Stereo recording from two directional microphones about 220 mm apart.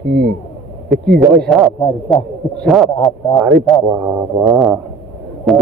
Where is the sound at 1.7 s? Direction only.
25° left (ahead or behind).